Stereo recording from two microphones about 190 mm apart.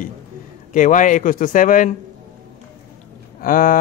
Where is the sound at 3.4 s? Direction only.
45° left (ahead or behind).